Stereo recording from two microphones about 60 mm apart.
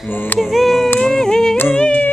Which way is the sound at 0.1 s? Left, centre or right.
Left.